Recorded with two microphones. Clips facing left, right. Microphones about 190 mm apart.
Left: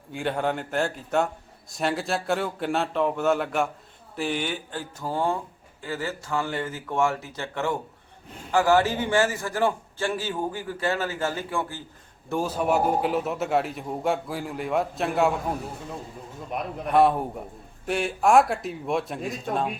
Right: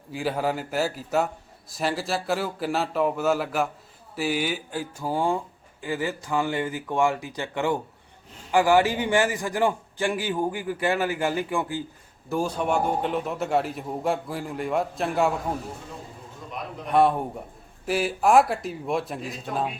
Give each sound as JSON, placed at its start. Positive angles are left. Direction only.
{"t": 0.1, "sound": "a man's voice", "side_deg": 0}
{"t": 12.3, "sound": "a man's voice", "side_deg": 5}
{"t": 16.9, "sound": "a man's voice", "side_deg": 0}